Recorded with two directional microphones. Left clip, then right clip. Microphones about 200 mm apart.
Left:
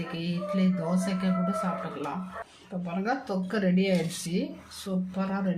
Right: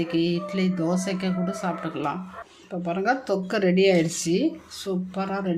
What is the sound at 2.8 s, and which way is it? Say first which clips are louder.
Speech: right 7 dB; 45° right (ahead or behind).